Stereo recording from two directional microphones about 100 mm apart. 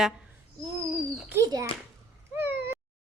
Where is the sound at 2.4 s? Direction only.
20° right (ahead or behind).